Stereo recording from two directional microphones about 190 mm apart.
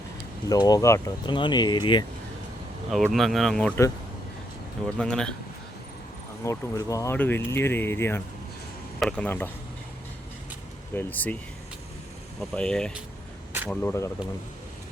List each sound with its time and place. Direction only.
0.4 s speech: 20° left (ahead or behind)
2.9 s speech: centre (ahead or behind)
4.9 s speech: 5° left (ahead or behind)
6.4 s speech: 15° left (ahead or behind)
10.9 s speech: 10° left (ahead or behind)
12.4 s speech: 5° left (ahead or behind)